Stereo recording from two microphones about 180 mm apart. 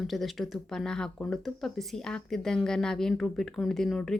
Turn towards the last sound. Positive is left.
turn(degrees=0)  # may be behind; listen again after turning